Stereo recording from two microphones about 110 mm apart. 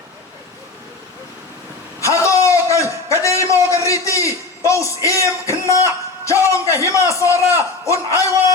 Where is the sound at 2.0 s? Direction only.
30° left (ahead or behind).